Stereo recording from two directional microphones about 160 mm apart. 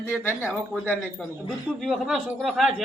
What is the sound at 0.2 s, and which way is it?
Speech, 15° left (ahead or behind).